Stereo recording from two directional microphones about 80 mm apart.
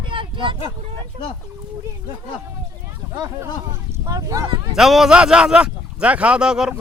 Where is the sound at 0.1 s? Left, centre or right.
Right.